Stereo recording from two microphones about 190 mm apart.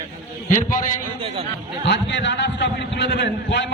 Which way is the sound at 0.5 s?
45° left (ahead or behind).